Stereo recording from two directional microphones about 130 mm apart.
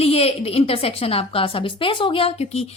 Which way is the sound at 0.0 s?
50° left (ahead or behind).